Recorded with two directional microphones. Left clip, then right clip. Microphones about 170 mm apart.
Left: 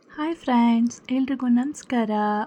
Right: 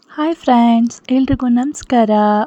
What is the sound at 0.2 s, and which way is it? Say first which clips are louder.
Speech: right 9 dB; 30° right (ahead or behind).